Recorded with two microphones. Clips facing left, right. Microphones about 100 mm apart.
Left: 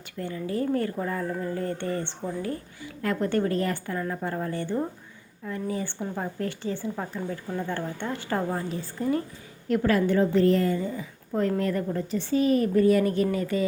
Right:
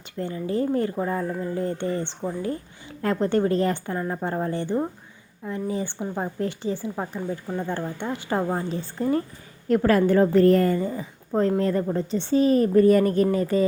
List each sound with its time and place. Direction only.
0.2 s a woman's voice: 25° right (ahead or behind)